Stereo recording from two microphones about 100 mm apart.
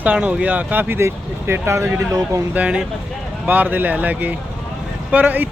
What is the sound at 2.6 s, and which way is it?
Speech, 15° right (ahead or behind).